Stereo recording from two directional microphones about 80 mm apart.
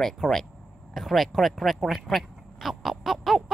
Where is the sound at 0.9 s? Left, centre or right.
Centre.